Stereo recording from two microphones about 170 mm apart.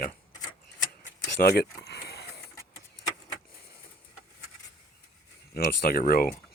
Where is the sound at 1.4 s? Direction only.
65° left (ahead or behind).